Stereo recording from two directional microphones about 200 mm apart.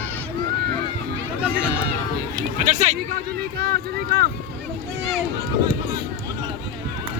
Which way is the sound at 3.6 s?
50° right (ahead or behind).